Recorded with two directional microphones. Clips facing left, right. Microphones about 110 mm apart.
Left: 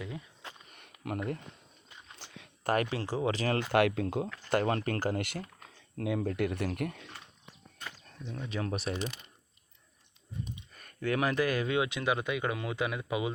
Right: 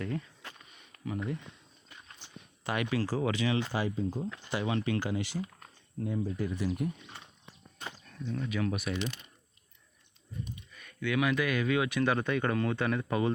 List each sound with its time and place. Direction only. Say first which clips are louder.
0.0 s speech: right 6 dB; 10° left (ahead or behind)
0.7 s a sound: left 2 dB; 60° left (ahead or behind)
2.2 s a sound: left 2 dB; 90° left
2.6 s speech: left 4 dB; 40° left (ahead or behind)
2.9 s speech: right 1 dB; 25° left (ahead or behind)
3.3 s speech: right 1 dB; 45° left (ahead or behind)
3.7 s speech: left 6 dB; 70° left (ahead or behind)
4.4 s speech: left 3 dB; 50° left (ahead or behind)
6.0 s speech: left 2 dB; 80° left
8.4 s speech: even; 30° left (ahead or behind)
10.7 s speech: left 2 dB; 45° left (ahead or behind); by 13.3 s 10° left (ahead or behind)